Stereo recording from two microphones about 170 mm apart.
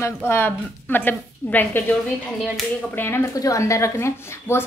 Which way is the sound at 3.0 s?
15° left (ahead or behind).